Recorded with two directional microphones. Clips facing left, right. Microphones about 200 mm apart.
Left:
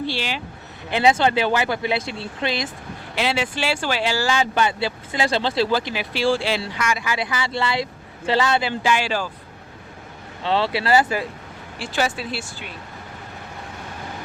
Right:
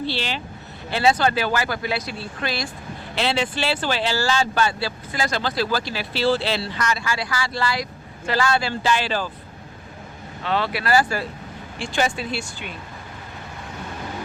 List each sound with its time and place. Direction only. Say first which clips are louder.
0.0 s speech: even; 10° left (ahead or behind)
3.2 s speech: even; 10° left (ahead or behind)
10.4 s speech: left 3 dB; 30° left (ahead or behind)
11.8 s speech: even; 5° left (ahead or behind)